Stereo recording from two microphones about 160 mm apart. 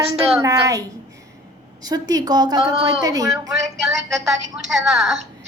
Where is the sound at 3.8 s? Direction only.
Centre (ahead or behind).